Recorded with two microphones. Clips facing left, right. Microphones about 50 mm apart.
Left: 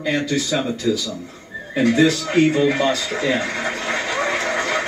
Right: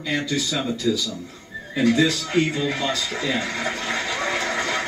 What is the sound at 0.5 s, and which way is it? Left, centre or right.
Speech, left.